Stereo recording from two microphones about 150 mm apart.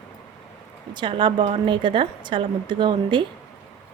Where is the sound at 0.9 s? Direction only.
35° right (ahead or behind).